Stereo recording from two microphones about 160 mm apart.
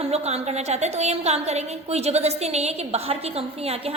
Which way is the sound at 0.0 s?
40° right (ahead or behind).